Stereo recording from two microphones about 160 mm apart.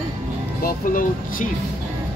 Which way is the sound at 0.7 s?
55° left (ahead or behind).